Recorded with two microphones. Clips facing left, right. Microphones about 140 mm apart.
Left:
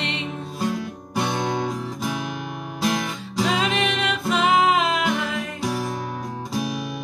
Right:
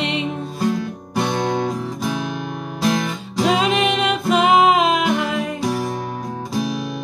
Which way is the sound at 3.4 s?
20° right (ahead or behind).